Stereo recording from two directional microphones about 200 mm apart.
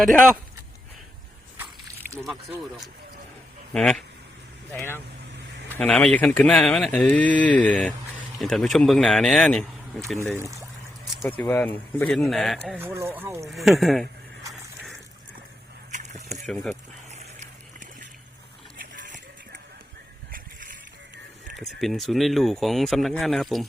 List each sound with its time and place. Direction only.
2.1 s speech: centre (ahead or behind)
3.7 s a man's voice: 5° left (ahead or behind)
11.3 s speech: 10° left (ahead or behind); by 13.5 s 15° right (ahead or behind)
13.5 s speech: centre (ahead or behind)
15.9 s a sound: 35° right (ahead or behind)
16.3 s speech: centre (ahead or behind)
20.3 s bicycle: 40° right (ahead or behind)
21.5 s speech: centre (ahead or behind)